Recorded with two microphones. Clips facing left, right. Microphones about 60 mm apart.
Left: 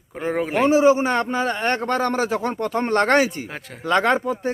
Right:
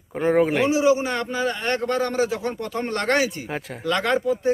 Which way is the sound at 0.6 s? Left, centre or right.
Left.